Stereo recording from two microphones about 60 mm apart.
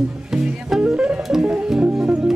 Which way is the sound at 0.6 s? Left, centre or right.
Centre.